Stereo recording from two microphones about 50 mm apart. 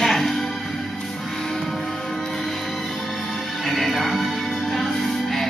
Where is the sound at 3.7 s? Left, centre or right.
Centre.